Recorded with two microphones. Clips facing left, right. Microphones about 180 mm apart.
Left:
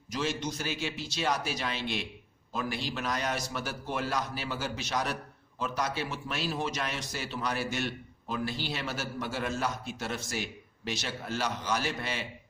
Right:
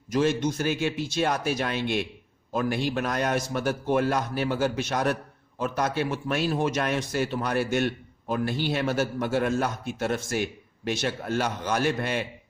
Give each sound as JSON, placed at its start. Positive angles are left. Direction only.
{"t": 0.1, "sound": "a man's voice", "side_deg": -55}